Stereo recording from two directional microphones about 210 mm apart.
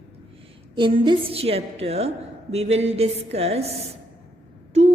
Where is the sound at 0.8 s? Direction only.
25° right (ahead or behind).